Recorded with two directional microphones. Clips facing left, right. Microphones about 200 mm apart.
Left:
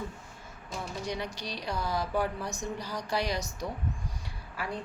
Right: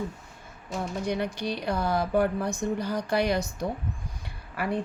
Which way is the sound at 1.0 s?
55° right (ahead or behind).